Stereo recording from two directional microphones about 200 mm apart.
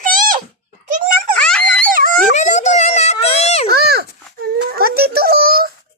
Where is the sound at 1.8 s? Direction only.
45° right (ahead or behind).